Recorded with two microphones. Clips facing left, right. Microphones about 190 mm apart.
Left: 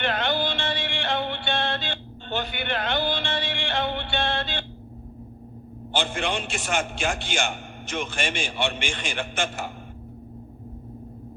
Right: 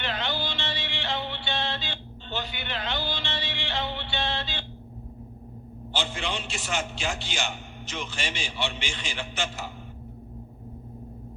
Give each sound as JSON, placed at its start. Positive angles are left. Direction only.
{"t": 0.0, "sound": "music", "side_deg": 55}
{"t": 5.9, "sound": "a man's voice", "side_deg": 50}